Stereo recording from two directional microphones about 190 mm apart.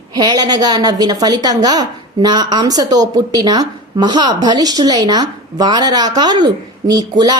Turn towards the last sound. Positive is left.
turn(degrees=-20)  # may be behind; listen again after turning